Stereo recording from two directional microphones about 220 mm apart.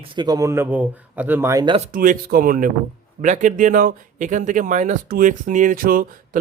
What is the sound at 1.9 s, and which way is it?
Speech, 40° right (ahead or behind).